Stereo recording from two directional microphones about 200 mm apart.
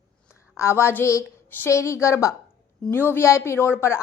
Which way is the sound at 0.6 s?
15° left (ahead or behind).